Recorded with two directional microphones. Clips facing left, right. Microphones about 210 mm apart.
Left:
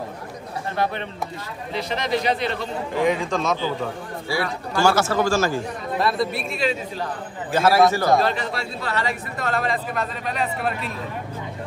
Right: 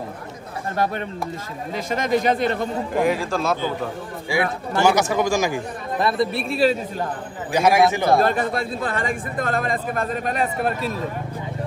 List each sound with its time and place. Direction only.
1.7 s speech: 45° right (ahead or behind)
2.9 s a man's voice: centre (ahead or behind)
4.3 s speech: 20° right (ahead or behind)
6.5 s speech: 40° right (ahead or behind)
7.5 s speech: 15° right (ahead or behind)
8.2 s speech: 50° right (ahead or behind)